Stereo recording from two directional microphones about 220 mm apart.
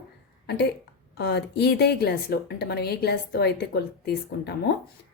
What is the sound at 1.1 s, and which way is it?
Speech, 50° left (ahead or behind).